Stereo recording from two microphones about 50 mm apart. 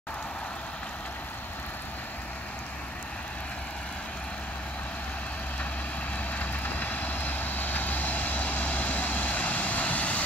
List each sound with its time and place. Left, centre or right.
6.3 s vehicle: left